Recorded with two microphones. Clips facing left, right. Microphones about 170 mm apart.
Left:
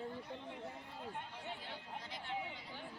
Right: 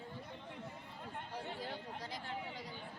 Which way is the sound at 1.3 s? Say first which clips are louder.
Right 4 dB; 40° right (ahead or behind).